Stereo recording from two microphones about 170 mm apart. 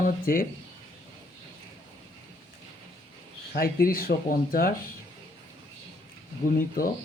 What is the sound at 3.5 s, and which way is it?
Speech, 60° left (ahead or behind).